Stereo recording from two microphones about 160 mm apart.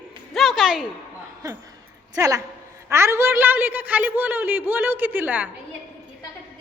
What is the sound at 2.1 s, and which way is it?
A woman's voice, 20° right (ahead or behind).